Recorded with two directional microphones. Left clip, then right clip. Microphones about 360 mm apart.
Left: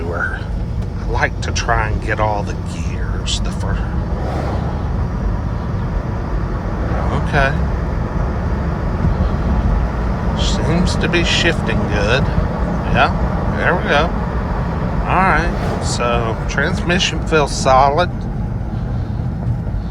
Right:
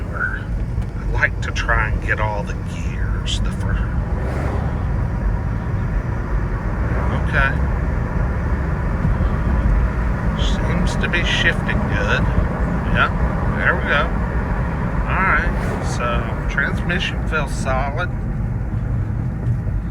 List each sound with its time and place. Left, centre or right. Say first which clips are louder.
1.1 s speech: left 1 dB; centre
7.3 s speech: left 2 dB; centre
10.4 s speech: left 6 dB; centre
13.6 s speech: left 3 dB; centre
15.1 s speech: left 3 dB; centre